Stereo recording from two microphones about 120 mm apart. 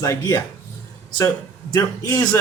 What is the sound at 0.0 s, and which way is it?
Speech, 25° left (ahead or behind).